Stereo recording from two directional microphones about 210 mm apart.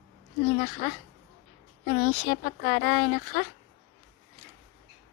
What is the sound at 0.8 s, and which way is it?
Speech, 45° left (ahead or behind).